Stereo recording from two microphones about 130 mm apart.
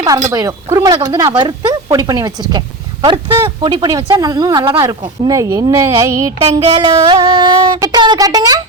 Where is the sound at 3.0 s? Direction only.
35° right (ahead or behind).